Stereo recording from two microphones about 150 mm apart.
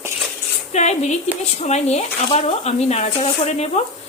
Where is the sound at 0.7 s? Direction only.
50° left (ahead or behind).